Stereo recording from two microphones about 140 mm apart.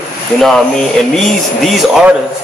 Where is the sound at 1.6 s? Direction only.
5° right (ahead or behind).